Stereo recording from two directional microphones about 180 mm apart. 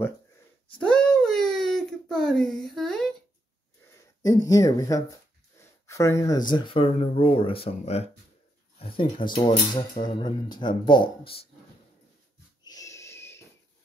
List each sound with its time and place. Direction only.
0.7 s baby cry: 5° left (ahead or behind)
4.2 s speech: 20° left (ahead or behind)
5.6 s a sound: 15° left (ahead or behind)
6.5 s speech: 25° left (ahead or behind)
12.6 s wheeze: 20° left (ahead or behind)